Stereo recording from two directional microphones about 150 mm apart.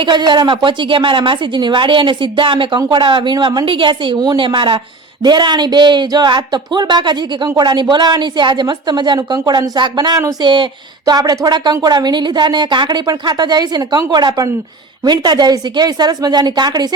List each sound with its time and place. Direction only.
0.0 s a woman's voice: 30° right (ahead or behind)